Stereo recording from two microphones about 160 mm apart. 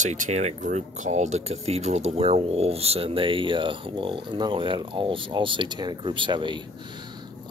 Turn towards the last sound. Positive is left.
turn(degrees=-30)  # may be behind; listen again after turning